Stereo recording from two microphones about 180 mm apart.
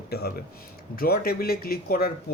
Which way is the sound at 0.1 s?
60° left (ahead or behind).